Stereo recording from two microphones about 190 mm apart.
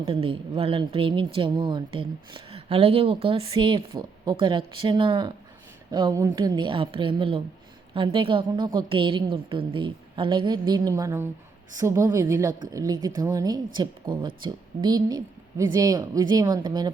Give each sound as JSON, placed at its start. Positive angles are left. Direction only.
{"t": 0.0, "sound": "a woman's voice", "side_deg": -30}